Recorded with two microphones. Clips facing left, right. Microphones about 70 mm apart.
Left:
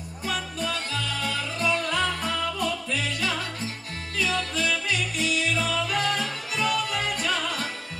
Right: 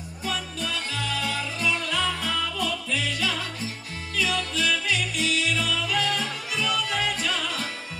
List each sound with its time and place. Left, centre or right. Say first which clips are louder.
0.2 s music: left 1 dB; left